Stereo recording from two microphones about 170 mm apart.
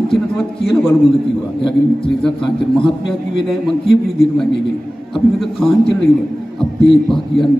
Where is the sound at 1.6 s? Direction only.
30° left (ahead or behind).